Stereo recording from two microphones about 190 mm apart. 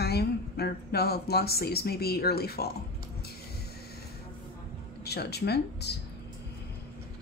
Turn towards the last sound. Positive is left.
turn(degrees=60)  # may be behind; listen again after turning